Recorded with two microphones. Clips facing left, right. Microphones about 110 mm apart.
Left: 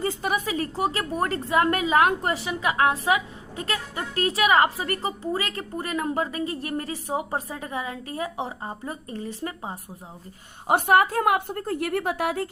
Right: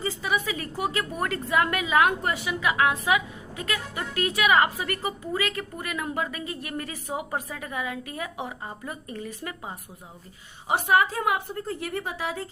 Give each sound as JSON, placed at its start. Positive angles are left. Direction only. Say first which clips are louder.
{"t": 0.0, "sound": "a woman's voice", "louder": "left 2 dB", "side_deg": 50}
{"t": 10.7, "sound": "a woman's voice", "louder": "left 3 dB", "side_deg": 55}